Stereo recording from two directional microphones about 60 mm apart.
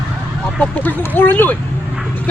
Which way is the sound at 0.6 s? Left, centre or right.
Left.